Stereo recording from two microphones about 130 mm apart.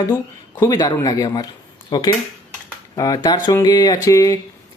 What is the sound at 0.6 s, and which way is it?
Speech, 30° left (ahead or behind).